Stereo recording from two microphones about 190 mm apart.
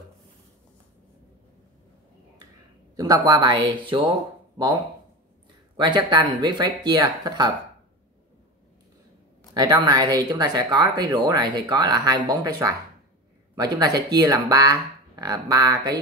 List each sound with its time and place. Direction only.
3.0 s speech: 20° right (ahead or behind)
5.8 s speech: 20° right (ahead or behind)
9.5 s speech: 20° right (ahead or behind)